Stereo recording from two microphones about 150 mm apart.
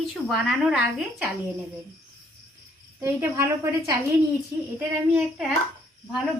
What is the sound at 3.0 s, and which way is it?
A woman's voice, 20° right (ahead or behind).